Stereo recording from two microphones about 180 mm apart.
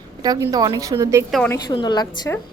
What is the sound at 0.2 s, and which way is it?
A woman's voice, 20° right (ahead or behind).